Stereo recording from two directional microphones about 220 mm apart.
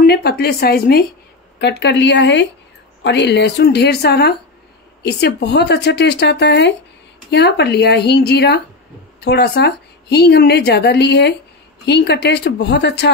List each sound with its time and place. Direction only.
0.0 s a woman's voice: 45° left (ahead or behind)